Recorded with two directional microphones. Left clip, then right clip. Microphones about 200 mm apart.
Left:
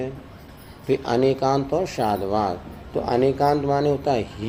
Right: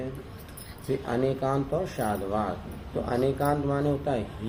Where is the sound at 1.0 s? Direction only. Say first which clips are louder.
Left 7 dB; 25° left (ahead or behind).